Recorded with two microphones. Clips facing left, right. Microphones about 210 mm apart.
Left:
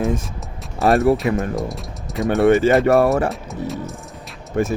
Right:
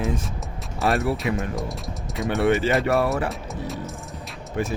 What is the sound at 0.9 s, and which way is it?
Speech, 45° left (ahead or behind).